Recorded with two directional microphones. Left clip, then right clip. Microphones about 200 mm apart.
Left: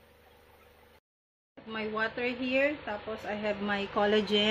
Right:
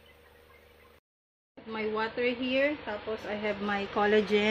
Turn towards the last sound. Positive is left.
turn(degrees=5)  # may be behind; listen again after turning